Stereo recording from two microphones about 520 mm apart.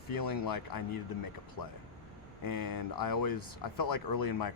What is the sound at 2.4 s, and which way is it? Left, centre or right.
Speech, left.